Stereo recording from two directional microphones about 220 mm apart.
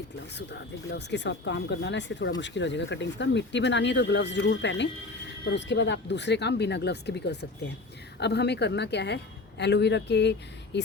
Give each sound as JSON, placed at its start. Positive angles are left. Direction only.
{"t": 0.3, "sound": "speech", "side_deg": 50}